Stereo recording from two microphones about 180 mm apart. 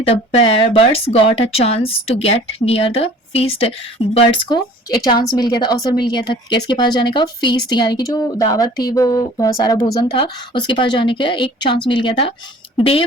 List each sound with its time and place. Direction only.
0.3 s speech: 30° left (ahead or behind)